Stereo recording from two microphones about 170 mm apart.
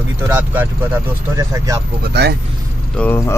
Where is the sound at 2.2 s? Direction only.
85° right.